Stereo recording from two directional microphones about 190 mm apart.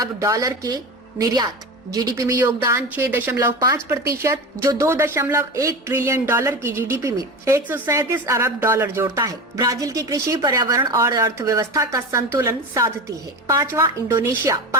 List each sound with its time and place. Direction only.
0.0 s a woman's voice: 15° right (ahead or behind)